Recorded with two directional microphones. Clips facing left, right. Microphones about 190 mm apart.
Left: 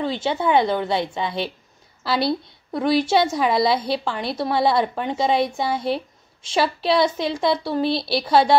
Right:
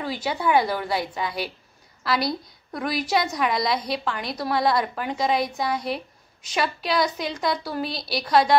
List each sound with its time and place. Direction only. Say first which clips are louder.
0.0 s a woman's voice: left 4 dB; 25° left (ahead or behind)